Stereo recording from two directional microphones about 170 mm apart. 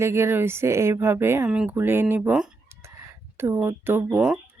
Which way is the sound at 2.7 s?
15° right (ahead or behind).